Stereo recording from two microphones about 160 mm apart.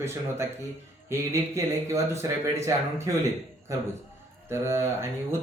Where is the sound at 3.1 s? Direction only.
20° right (ahead or behind).